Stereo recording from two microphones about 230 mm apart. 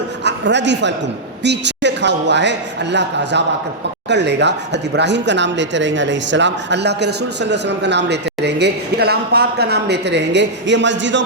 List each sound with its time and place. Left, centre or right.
0.3 s a man's voice: right